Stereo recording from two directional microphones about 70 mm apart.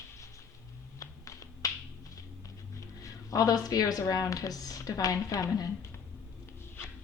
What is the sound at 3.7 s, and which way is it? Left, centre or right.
A woman's voice, left.